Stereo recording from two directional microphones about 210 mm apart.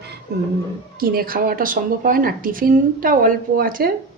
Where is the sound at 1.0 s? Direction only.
45° right (ahead or behind).